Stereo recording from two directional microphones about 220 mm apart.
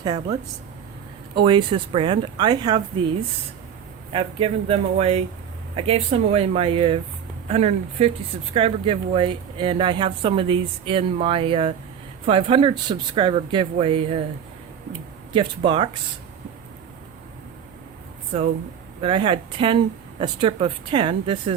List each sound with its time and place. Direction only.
0.0 s speech: 20° right (ahead or behind)
1.4 s speech: 20° right (ahead or behind)
4.1 s speech: 25° right (ahead or behind)
15.3 s speech: 20° right (ahead or behind)
19.0 s speech: 25° right (ahead or behind)